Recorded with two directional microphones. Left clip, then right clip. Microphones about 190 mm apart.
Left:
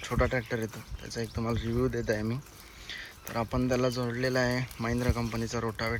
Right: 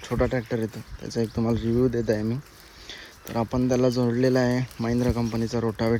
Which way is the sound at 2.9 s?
30° right (ahead or behind).